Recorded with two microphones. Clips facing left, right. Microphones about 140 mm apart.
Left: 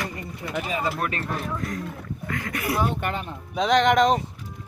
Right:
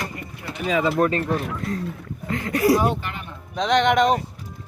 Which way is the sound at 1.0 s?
30° right (ahead or behind).